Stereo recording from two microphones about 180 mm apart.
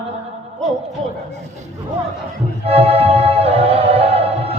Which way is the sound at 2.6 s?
35° right (ahead or behind).